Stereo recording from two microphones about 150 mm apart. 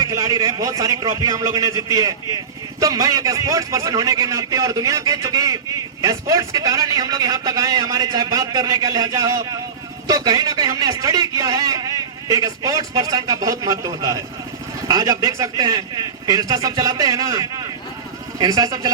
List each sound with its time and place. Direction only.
0.0 s a man's voice: 20° right (ahead or behind)